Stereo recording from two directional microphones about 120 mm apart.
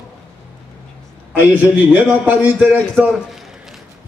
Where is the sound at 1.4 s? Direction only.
15° right (ahead or behind).